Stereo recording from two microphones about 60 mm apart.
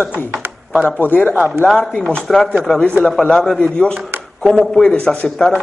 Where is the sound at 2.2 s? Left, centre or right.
Centre.